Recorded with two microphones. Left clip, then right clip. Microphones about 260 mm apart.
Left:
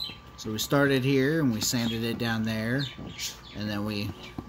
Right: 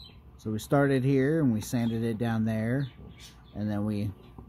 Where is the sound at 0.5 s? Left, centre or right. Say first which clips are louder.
Left 1 dB; right.